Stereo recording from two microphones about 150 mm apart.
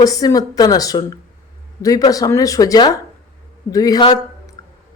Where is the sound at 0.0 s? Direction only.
25° left (ahead or behind).